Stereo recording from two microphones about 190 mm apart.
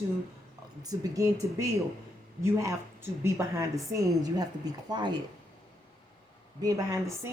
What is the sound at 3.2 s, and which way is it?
A woman's voice, 15° right (ahead or behind).